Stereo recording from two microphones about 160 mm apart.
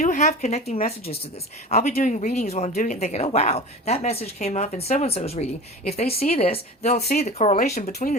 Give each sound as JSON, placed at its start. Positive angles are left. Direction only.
{"t": 0.0, "sound": "speech", "side_deg": 50}